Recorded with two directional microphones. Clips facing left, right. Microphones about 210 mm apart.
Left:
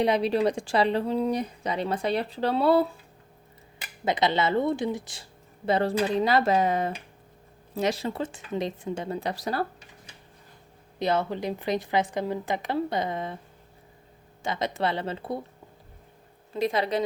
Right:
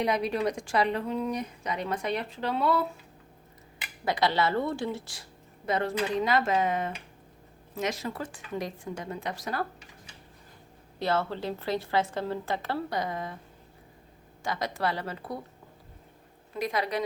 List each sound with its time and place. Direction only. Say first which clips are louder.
0.0 s a woman's voice: left 4 dB; 30° left (ahead or behind)
4.0 s speech: left 2 dB; 20° left (ahead or behind)
5.6 s a woman's voice: left 4 dB; 30° left (ahead or behind)
11.0 s a woman's voice: left 3 dB; 15° left (ahead or behind)
14.4 s speech: left 3 dB; 20° left (ahead or behind)
16.6 s speech: left 4 dB; 25° left (ahead or behind)